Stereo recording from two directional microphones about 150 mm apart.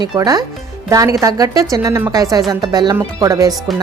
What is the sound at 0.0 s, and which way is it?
Speech, 25° right (ahead or behind).